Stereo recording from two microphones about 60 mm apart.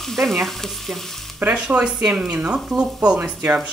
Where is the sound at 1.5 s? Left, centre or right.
Centre.